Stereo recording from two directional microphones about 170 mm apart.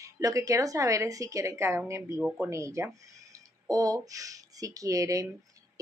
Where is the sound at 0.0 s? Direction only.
20° right (ahead or behind).